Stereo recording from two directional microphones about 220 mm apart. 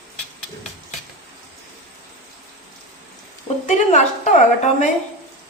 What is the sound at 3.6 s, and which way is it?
Speech, 35° left (ahead or behind).